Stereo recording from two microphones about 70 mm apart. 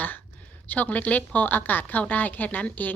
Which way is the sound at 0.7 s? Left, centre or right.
Left.